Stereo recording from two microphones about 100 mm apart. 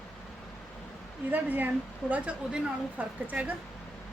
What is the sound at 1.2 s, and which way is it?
A woman's voice, 20° right (ahead or behind).